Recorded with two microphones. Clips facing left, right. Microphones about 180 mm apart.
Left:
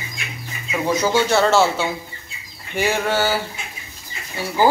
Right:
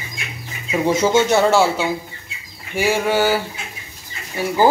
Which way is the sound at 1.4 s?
10° right (ahead or behind).